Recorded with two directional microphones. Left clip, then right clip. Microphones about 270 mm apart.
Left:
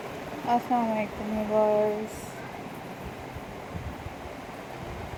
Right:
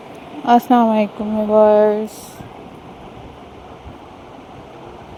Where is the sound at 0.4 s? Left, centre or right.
Right.